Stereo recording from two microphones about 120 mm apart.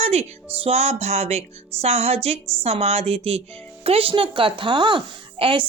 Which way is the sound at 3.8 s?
50° right (ahead or behind).